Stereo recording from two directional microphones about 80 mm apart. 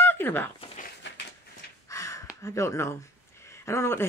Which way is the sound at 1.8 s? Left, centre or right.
Left.